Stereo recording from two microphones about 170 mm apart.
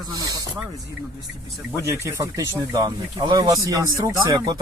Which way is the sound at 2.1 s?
20° right (ahead or behind).